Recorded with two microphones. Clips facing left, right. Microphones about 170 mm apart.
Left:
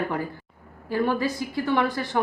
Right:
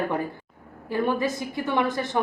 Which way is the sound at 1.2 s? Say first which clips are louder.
Even; 20° right (ahead or behind).